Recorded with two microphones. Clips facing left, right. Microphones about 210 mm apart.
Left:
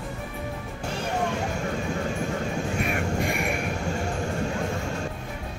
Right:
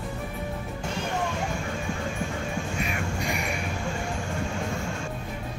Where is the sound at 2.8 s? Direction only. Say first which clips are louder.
Left 4 dB; 55° left (ahead or behind).